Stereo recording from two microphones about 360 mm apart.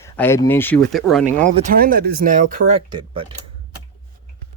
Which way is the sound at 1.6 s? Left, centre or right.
Right.